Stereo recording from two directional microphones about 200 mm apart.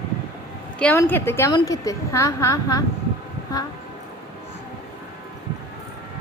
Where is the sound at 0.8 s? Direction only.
10° left (ahead or behind).